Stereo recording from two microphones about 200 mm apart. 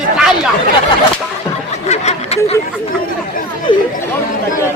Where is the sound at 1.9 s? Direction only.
35° left (ahead or behind).